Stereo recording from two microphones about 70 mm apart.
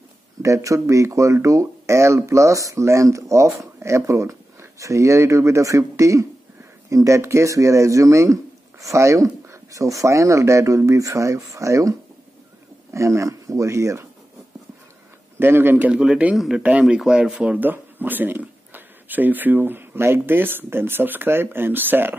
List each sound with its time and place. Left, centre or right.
0.4 s speech: right
7.2 s speech: right
12.9 s speech: right
15.3 s a man's voice: right
15.9 s speech: centre